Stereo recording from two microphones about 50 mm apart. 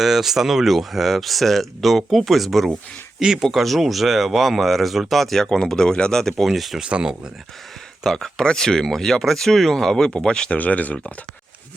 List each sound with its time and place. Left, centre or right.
0.0 s speech: centre
3.2 s speech: centre
6.4 s speech: centre
6.8 s speech: centre
8.0 s speech: centre
10.6 s speech: left